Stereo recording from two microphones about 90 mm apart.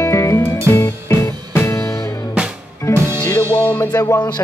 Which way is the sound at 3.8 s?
45° left (ahead or behind).